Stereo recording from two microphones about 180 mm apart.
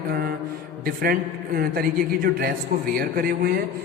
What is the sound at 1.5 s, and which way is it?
A man's voice, 55° right (ahead or behind).